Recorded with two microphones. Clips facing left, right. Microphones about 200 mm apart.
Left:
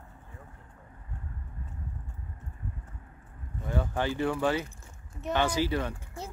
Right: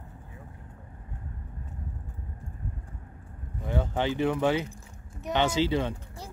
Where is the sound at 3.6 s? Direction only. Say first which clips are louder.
Right 2 dB; 20° right (ahead or behind).